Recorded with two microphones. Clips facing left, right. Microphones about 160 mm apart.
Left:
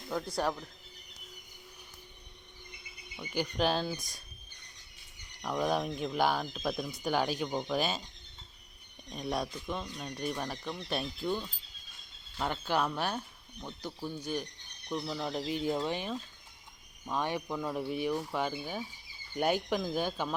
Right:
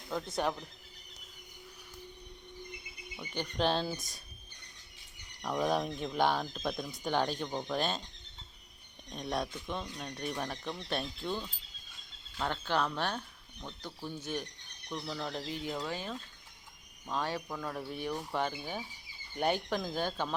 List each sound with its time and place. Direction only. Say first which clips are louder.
3.2 s speech: left 2 dB; 5° left (ahead or behind)
5.4 s speech: even; centre (ahead or behind)
9.0 s speech: left 1 dB; 5° left (ahead or behind)